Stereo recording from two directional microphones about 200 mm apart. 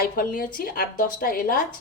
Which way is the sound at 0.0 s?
45° left (ahead or behind).